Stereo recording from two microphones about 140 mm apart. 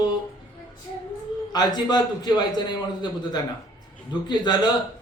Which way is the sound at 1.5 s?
30° left (ahead or behind).